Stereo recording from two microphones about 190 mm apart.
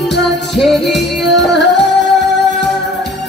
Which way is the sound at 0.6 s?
Centre (ahead or behind).